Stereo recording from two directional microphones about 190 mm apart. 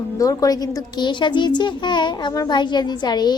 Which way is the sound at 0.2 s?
20° left (ahead or behind).